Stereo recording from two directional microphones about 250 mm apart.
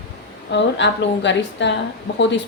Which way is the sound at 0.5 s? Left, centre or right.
Left.